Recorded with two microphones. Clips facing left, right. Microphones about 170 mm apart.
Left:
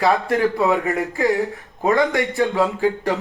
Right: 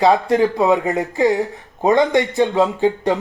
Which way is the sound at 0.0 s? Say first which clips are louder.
Right 4 dB; 20° right (ahead or behind).